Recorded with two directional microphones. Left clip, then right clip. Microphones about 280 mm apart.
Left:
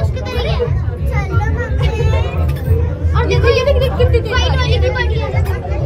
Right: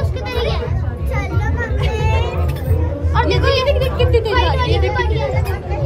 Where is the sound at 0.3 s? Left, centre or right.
Right.